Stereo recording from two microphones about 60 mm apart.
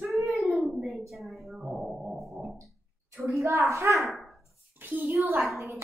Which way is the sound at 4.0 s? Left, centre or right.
Centre.